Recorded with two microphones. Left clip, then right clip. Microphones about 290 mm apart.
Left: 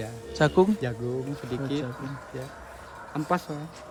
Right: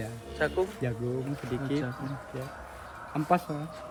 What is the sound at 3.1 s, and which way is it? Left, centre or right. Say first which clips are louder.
Speech: right 1 dB; centre.